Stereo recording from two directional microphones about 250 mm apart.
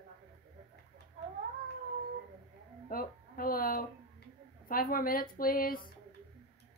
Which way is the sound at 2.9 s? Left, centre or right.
Left.